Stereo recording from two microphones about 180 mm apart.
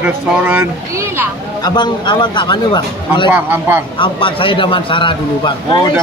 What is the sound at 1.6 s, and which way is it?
Speech, 25° left (ahead or behind).